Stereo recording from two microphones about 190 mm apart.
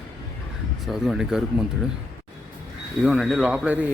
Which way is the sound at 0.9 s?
Centre (ahead or behind).